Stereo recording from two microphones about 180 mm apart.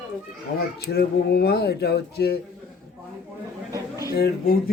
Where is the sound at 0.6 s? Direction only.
60° left (ahead or behind).